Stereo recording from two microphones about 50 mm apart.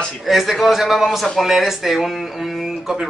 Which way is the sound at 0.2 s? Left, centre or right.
Centre.